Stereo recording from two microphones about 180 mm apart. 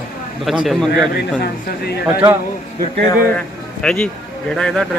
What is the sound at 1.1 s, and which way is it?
Speech, 60° left (ahead or behind).